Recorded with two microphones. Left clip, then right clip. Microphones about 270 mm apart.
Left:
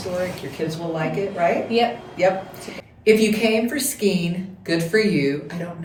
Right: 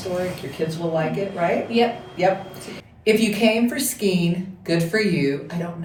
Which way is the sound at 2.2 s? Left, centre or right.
Centre.